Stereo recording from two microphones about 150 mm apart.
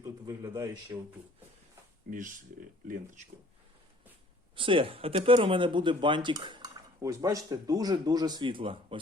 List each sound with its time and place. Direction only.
0.0 s a man's voice: 25° right (ahead or behind)
2.0 s speech: 60° right (ahead or behind)
4.5 s speech: 35° right (ahead or behind)